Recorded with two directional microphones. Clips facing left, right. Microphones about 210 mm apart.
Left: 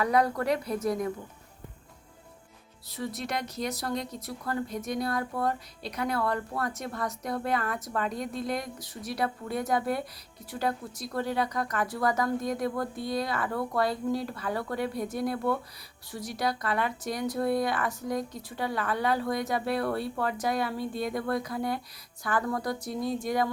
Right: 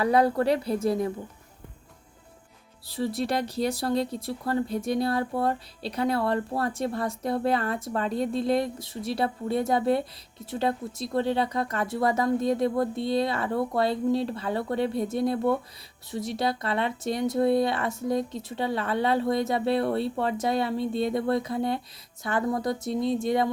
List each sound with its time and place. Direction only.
0.0 s speech: 30° right (ahead or behind)
2.8 s speech: 30° right (ahead or behind)